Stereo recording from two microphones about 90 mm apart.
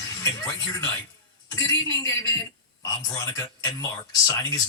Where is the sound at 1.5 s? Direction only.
35° left (ahead or behind).